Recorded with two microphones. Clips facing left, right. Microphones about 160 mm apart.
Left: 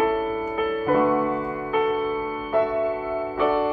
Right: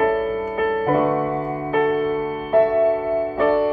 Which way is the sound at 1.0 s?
35° right (ahead or behind).